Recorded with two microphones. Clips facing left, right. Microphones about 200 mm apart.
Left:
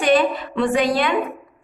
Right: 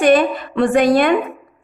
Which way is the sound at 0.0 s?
50° right (ahead or behind).